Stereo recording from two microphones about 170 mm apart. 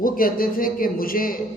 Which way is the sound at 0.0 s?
55° left (ahead or behind).